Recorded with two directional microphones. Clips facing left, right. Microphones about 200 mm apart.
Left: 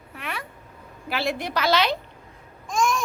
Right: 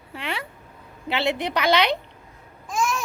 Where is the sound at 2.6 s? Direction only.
5° right (ahead or behind).